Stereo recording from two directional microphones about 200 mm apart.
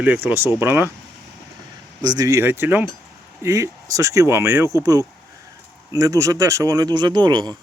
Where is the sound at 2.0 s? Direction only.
15° right (ahead or behind).